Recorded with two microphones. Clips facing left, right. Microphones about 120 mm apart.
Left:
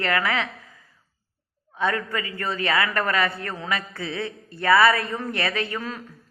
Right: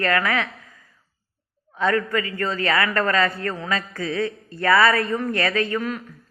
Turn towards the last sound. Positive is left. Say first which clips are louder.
# right 5 dB
turn(degrees=25)  # may be behind; listen again after turning